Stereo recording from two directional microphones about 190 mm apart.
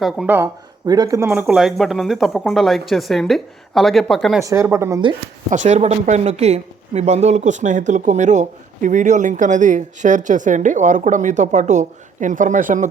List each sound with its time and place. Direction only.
0.0 s speech: centre (ahead or behind)
0.3 s speech: 15° right (ahead or behind); by 4.4 s centre (ahead or behind)
4.4 s speech: 15° right (ahead or behind)
5.5 s speech: 40° right (ahead or behind)